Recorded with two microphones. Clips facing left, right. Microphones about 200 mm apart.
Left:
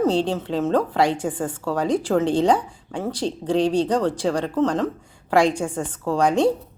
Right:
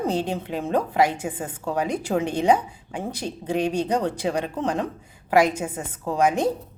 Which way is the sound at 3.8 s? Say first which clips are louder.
Left 3 dB; 15° right (ahead or behind).